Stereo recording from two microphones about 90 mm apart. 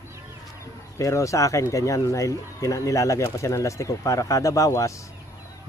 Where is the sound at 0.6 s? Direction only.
35° left (ahead or behind).